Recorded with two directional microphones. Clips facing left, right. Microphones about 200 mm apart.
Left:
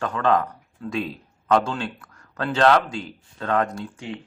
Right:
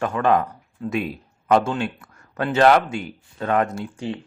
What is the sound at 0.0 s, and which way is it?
Speech, 25° right (ahead or behind).